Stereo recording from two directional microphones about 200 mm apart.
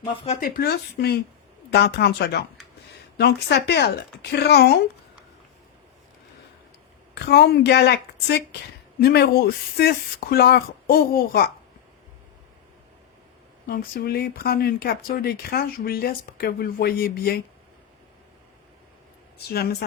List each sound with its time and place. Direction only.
0.3 s speech: 45° left (ahead or behind)
7.1 s speech: 55° left (ahead or behind)
13.7 s speech: 45° left (ahead or behind)